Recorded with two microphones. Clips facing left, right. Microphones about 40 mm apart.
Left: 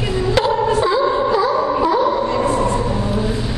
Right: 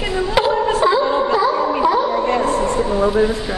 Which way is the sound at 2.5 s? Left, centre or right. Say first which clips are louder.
Left 1 dB; left.